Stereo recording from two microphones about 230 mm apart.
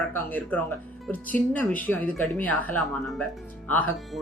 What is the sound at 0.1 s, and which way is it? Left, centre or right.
Speech, centre.